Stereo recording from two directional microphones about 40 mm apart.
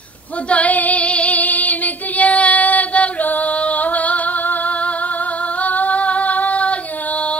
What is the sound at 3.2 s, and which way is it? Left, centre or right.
Singing, left.